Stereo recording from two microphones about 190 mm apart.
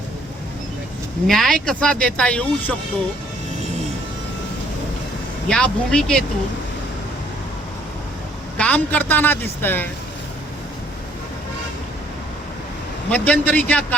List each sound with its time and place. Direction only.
1.3 s speech: centre (ahead or behind)
5.5 s speech: 5° left (ahead or behind)
8.5 s a woman's voice: 10° left (ahead or behind)
13.1 s a woman's voice: 10° left (ahead or behind)